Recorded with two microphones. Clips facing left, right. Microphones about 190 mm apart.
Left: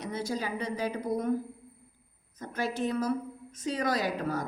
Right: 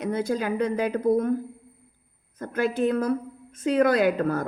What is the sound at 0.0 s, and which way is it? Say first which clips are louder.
A woman's voice: right 7 dB; 55° right (ahead or behind).